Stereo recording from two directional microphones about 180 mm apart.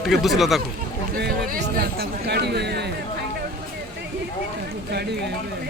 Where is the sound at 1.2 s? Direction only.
65° right (ahead or behind).